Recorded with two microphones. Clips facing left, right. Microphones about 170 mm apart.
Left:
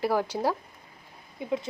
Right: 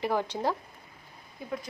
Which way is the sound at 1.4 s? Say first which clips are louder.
Left 6 dB; 20° left (ahead or behind).